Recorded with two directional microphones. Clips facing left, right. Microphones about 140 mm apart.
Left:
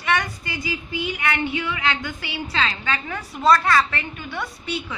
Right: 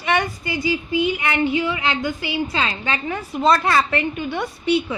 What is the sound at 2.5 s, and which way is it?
A woman's voice, 15° right (ahead or behind).